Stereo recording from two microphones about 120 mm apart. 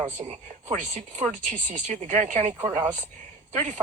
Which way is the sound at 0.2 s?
70° right (ahead or behind).